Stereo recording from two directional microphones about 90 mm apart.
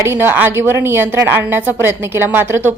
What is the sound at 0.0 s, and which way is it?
A woman's voice, 25° right (ahead or behind).